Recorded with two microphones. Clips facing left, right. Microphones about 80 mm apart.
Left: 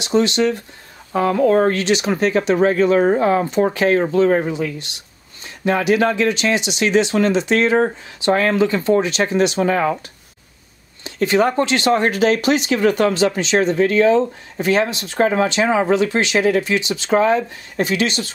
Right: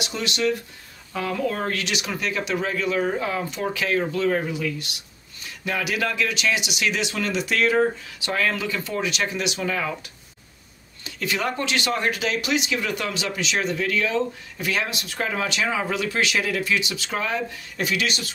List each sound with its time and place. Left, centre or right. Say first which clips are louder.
0.0 s speech: left 9 dB; left
11.1 s speech: left 10 dB; left